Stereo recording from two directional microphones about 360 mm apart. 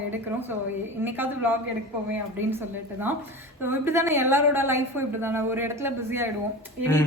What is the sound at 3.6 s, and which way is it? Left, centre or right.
A woman's voice, centre.